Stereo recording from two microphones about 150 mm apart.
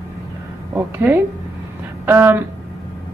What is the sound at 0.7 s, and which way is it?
A woman's voice, 15° right (ahead or behind).